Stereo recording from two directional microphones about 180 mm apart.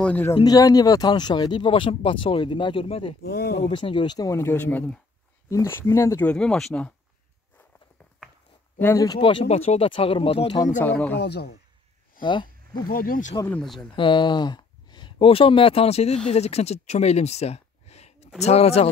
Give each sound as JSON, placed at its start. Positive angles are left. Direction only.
{"t": 0.0, "sound": "speech", "side_deg": 10}
{"t": 0.4, "sound": "speech", "side_deg": 20}
{"t": 3.2, "sound": "speech", "side_deg": 60}
{"t": 3.6, "sound": "speech", "side_deg": 30}
{"t": 8.7, "sound": "speech", "side_deg": 15}
{"t": 10.8, "sound": "speech", "side_deg": 10}
{"t": 11.1, "sound": "speech", "side_deg": 65}
{"t": 12.2, "sound": "a sound", "side_deg": 25}
{"t": 12.8, "sound": "speech", "side_deg": 55}
{"t": 13.6, "sound": "speech", "side_deg": 0}
{"t": 13.9, "sound": "speech", "side_deg": 25}